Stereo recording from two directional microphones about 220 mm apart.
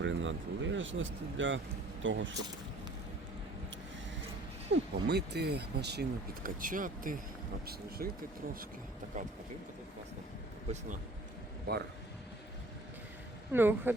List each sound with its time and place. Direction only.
0.0 s speech: 60° right (ahead or behind)
4.7 s speech: 50° right (ahead or behind)
9.1 s speech: 35° right (ahead or behind)
10.7 s speech: 35° right (ahead or behind)
13.5 s speech: 10° right (ahead or behind)